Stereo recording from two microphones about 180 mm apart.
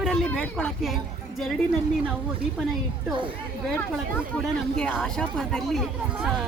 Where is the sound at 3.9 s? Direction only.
Centre (ahead or behind).